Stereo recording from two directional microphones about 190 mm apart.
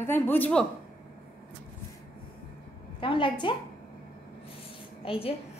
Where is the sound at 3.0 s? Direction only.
25° left (ahead or behind).